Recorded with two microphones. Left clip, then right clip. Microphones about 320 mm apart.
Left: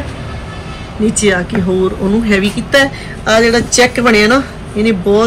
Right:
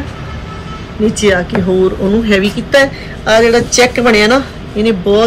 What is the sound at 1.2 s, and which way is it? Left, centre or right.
Speech, centre.